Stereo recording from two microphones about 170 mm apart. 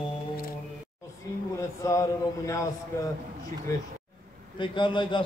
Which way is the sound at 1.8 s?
20° left (ahead or behind).